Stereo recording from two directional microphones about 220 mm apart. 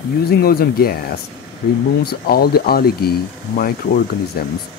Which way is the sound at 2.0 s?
45° left (ahead or behind).